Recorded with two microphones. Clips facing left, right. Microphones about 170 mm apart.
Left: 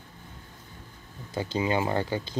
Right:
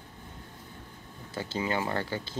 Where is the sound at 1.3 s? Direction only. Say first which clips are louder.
Left 4 dB; 15° left (ahead or behind).